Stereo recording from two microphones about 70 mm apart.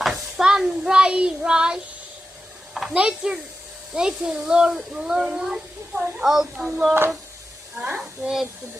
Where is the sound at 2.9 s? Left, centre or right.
Centre.